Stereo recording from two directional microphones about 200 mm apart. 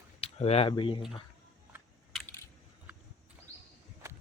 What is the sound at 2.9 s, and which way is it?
Horse, 5° right (ahead or behind).